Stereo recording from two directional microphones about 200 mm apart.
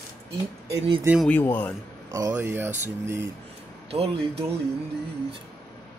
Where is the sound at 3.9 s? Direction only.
30° right (ahead or behind).